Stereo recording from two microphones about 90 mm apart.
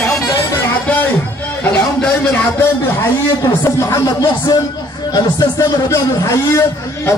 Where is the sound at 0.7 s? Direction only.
20° left (ahead or behind).